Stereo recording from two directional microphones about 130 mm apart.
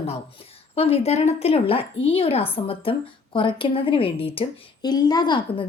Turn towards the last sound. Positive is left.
turn(degrees=35)  # may be behind; listen again after turning